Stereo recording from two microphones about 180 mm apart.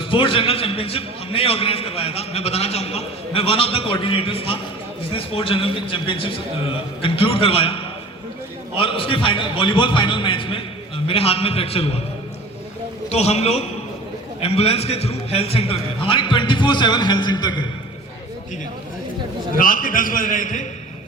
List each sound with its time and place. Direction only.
0.0 s a man's voice: 30° left (ahead or behind)
13.1 s a man's voice: 35° left (ahead or behind)
19.5 s a man's voice: 50° left (ahead or behind)